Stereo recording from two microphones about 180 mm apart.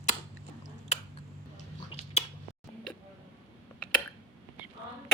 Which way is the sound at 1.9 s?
35° left (ahead or behind).